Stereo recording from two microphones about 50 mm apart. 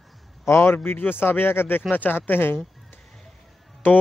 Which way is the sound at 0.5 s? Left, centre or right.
Left.